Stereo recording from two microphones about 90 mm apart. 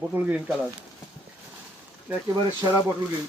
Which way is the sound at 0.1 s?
20° right (ahead or behind).